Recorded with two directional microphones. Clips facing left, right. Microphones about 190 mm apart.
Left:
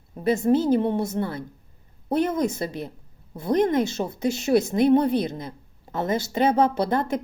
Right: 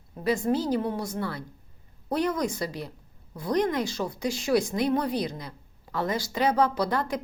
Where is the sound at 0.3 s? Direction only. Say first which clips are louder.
Left 5 dB; 25° left (ahead or behind).